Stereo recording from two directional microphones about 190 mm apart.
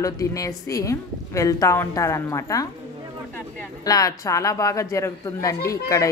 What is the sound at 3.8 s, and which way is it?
Speech, 20° left (ahead or behind).